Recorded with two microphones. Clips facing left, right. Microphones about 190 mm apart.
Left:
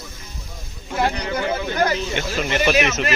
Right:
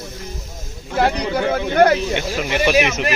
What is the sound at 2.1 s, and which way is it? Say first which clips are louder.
Speech: right 1 dB; 15° right (ahead or behind).